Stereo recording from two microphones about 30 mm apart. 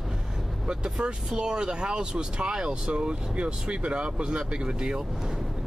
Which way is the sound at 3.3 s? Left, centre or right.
Right.